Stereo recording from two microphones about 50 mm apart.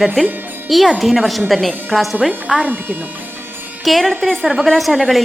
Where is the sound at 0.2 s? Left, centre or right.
Centre.